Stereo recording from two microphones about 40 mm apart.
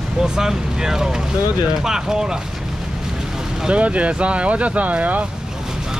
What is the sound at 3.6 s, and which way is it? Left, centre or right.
Speech, right.